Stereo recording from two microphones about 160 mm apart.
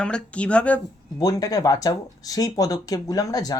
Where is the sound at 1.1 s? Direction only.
20° left (ahead or behind).